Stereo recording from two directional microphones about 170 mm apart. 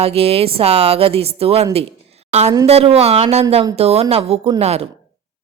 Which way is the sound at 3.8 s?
35° right (ahead or behind).